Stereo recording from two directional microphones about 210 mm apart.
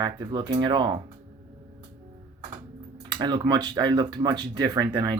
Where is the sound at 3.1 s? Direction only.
20° right (ahead or behind).